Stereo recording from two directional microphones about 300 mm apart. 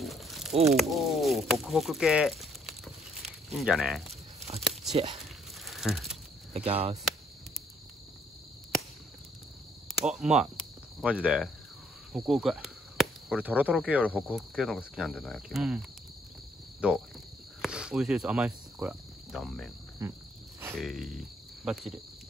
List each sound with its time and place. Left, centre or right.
0.0 s a sound: centre
0.5 s speech: right
0.7 s speech: centre
2.6 s a sound: centre
4.6 s tearing: centre
4.9 s speech: centre
5.7 s crumpling: centre
6.5 s speech: centre
9.8 s speech: centre
16.8 s speech: centre
20.0 s wild animals: centre
20.7 s speech: centre